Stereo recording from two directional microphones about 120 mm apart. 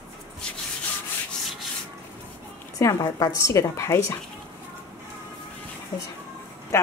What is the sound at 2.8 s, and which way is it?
Speech, 30° left (ahead or behind).